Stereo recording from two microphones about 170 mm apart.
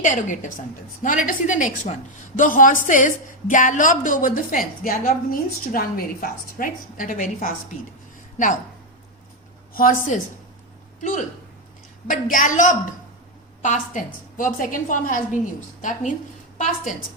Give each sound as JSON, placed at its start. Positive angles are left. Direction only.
{"t": 0.0, "sound": "a woman's voice", "side_deg": 50}
{"t": 9.7, "sound": "a woman's voice", "side_deg": 55}
{"t": 12.0, "sound": "a woman's voice", "side_deg": 50}